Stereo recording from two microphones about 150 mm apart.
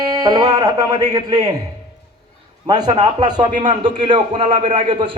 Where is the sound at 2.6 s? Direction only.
25° right (ahead or behind).